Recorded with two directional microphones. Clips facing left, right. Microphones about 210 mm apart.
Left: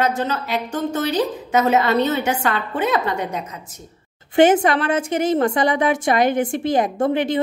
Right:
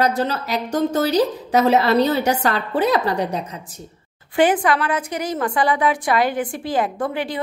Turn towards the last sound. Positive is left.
turn(degrees=25)  # may be behind; listen again after turning